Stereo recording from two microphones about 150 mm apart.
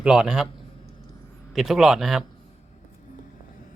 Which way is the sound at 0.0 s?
5° right (ahead or behind).